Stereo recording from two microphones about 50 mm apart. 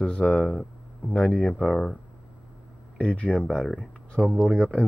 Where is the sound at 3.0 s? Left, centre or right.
Left.